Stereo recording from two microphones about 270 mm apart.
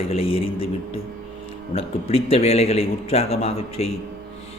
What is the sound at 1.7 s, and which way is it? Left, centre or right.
Speech, left.